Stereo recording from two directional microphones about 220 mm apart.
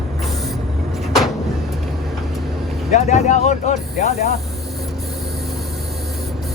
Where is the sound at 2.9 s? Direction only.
30° left (ahead or behind).